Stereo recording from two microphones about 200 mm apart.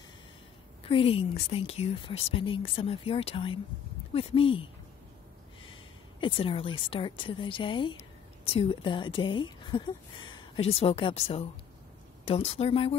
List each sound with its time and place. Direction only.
0.8 s speech: 25° left (ahead or behind)
6.2 s speech: 25° left (ahead or behind)